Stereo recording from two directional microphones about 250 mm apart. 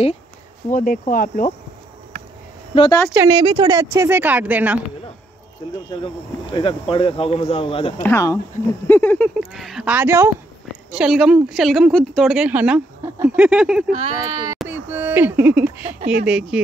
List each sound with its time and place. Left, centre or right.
0.7 s speech: left
2.7 s speech: centre
3.1 s a woman's voice: centre
5.6 s speech: centre
8.0 s a woman's voice: centre
14.2 s a woman's voice: centre
14.6 s a sound: centre
16.3 s a woman's voice: centre